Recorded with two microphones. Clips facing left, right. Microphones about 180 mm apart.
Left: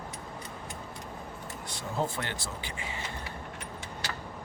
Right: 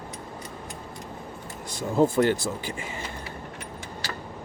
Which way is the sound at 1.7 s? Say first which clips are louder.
Right 11 dB; 45° right (ahead or behind).